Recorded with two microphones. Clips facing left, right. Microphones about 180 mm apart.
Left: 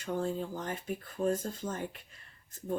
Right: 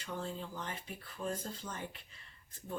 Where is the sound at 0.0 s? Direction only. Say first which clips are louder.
Left 8 dB; 45° left (ahead or behind).